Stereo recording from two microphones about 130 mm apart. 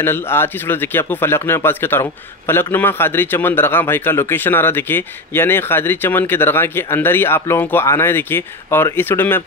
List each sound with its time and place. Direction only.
0.0 s a man's voice: 15° left (ahead or behind)